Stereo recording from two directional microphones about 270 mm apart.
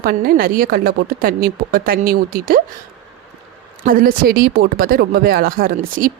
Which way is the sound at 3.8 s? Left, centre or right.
Right.